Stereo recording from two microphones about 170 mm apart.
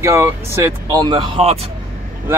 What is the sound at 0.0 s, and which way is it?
Speech, 15° right (ahead or behind).